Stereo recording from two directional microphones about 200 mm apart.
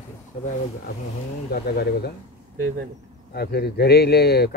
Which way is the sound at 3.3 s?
55° left (ahead or behind).